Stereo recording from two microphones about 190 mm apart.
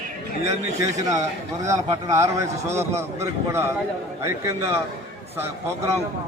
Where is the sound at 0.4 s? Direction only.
15° right (ahead or behind).